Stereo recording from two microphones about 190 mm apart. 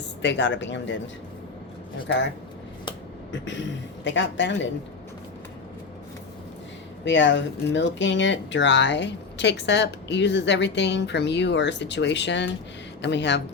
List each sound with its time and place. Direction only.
0.2 s speech: 70° left (ahead or behind)
4.0 s speech: 70° left (ahead or behind)
7.0 s speech: 70° left (ahead or behind)